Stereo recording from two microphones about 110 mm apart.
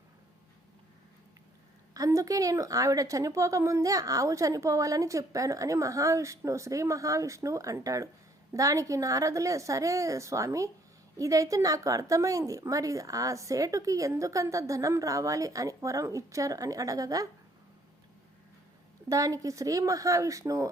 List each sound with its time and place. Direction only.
1.9 s a woman's voice: 30° right (ahead or behind)
19.0 s a woman's voice: 30° right (ahead or behind)